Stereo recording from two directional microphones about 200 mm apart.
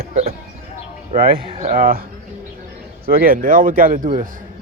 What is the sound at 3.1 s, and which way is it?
Speech, 45° right (ahead or behind).